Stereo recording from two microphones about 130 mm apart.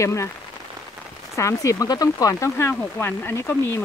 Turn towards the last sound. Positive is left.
turn(degrees=20)  # may be behind; listen again after turning